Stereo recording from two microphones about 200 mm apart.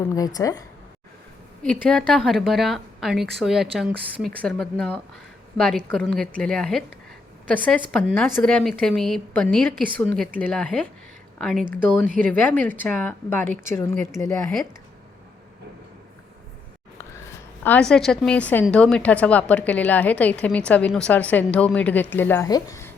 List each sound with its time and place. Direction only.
0.3 s a woman's voice: 15° left (ahead or behind)
1.6 s a woman's voice: 5° left (ahead or behind)
17.6 s a woman's voice: 5° left (ahead or behind)